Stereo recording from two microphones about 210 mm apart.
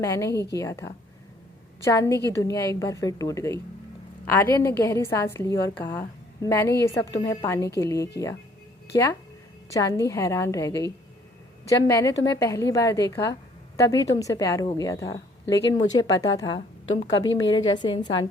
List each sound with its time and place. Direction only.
0.0 s a woman's voice: 15° left (ahead or behind)
17.7 s a woman's voice: 20° left (ahead or behind)